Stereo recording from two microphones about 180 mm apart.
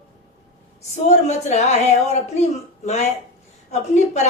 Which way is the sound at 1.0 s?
40° left (ahead or behind).